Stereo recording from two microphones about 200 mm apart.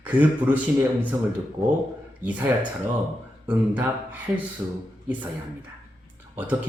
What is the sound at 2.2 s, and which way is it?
A man's voice, 5° right (ahead or behind).